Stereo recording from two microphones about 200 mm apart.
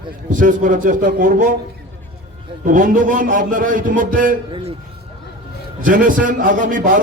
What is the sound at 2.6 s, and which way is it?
A man's voice, 40° right (ahead or behind).